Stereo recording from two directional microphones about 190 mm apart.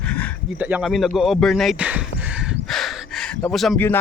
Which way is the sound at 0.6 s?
5° right (ahead or behind).